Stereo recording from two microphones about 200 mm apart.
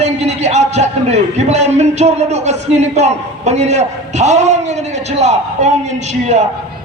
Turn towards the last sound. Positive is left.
turn(degrees=-35)  # may be behind; listen again after turning